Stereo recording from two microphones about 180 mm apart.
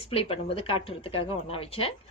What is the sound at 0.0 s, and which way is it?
A woman's voice, 30° left (ahead or behind).